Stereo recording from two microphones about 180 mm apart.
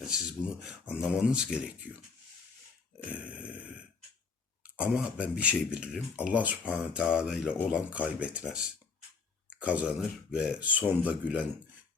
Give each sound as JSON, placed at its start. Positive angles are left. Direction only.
{"t": 0.0, "sound": "speech", "side_deg": -5}
{"t": 3.0, "sound": "dog", "side_deg": -10}
{"t": 4.6, "sound": "speech", "side_deg": -5}